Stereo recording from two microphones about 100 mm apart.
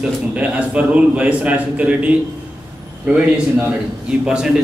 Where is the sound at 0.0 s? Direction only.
15° right (ahead or behind).